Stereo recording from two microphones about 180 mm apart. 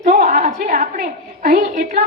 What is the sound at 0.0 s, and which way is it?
A woman's voice, 45° right (ahead or behind).